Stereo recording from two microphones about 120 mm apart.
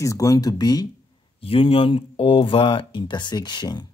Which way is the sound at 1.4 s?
50° left (ahead or behind).